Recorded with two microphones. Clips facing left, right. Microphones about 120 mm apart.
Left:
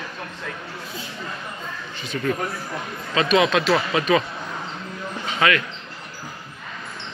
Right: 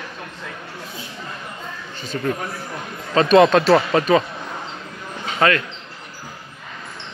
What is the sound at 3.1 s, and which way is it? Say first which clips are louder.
Speech: right 6 dB; 40° right (ahead or behind).